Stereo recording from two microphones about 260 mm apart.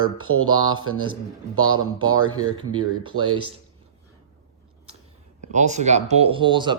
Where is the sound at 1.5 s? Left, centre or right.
Right.